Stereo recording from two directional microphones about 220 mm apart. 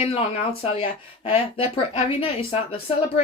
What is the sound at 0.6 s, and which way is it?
Speech, 25° left (ahead or behind).